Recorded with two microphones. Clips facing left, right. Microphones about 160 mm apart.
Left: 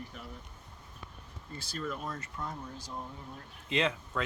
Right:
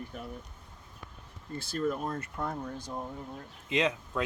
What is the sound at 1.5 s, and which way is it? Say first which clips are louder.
Speech: right 7 dB; 50° right (ahead or behind).